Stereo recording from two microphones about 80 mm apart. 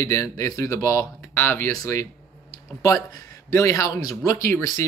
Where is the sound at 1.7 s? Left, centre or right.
Left.